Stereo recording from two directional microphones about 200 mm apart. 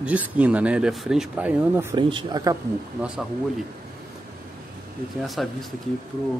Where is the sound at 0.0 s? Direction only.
5° right (ahead or behind).